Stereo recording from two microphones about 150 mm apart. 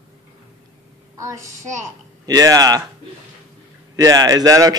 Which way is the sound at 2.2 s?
25° right (ahead or behind).